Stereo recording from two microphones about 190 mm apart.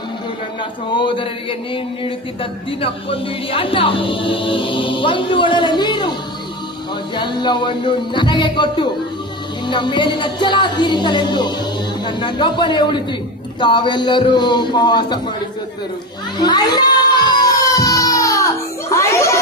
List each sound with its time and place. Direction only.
0.9 s speech: 25° left (ahead or behind)
7.2 s speech: 25° left (ahead or behind)
16.4 s child singing: 20° left (ahead or behind)